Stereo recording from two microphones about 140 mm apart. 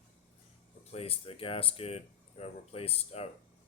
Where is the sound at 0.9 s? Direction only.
45° left (ahead or behind).